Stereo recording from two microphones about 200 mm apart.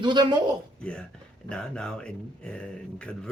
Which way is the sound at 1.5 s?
5° left (ahead or behind).